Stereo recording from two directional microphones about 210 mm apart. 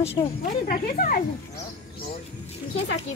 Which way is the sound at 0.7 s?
40° left (ahead or behind).